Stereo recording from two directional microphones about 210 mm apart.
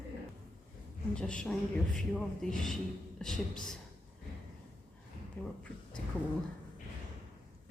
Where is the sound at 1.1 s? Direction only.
5° left (ahead or behind).